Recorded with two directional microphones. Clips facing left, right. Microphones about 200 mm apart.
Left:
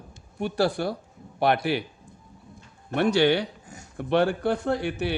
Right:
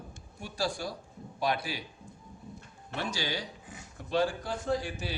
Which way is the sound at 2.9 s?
65° left (ahead or behind).